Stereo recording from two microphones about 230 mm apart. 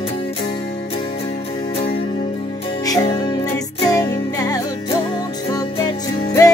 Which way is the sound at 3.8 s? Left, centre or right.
Centre.